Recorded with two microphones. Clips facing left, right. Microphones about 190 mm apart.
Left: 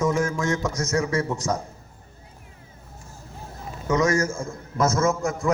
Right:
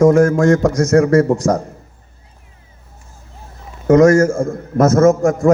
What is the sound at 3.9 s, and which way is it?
A man's voice, 60° right (ahead or behind).